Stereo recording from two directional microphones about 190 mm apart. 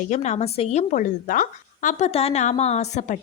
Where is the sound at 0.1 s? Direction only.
35° left (ahead or behind).